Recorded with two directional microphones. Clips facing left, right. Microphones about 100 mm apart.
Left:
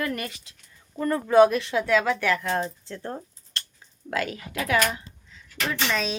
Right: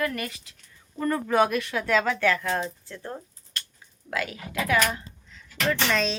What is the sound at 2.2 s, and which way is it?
Speech, 15° left (ahead or behind).